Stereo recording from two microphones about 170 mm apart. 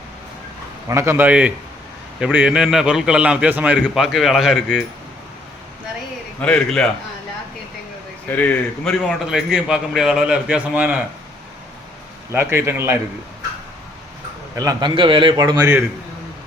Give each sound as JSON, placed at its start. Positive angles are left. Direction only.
{"t": 0.9, "sound": "a man's voice", "side_deg": -15}
{"t": 6.4, "sound": "a man's voice", "side_deg": 5}
{"t": 8.3, "sound": "a man's voice", "side_deg": 10}
{"t": 12.3, "sound": "a man's voice", "side_deg": -15}
{"t": 14.5, "sound": "a man's voice", "side_deg": -20}